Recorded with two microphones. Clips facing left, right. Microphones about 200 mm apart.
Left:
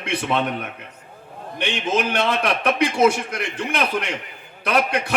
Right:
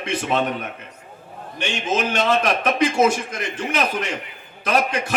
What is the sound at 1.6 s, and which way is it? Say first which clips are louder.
A man's voice: left 1 dB; 45° right (ahead or behind).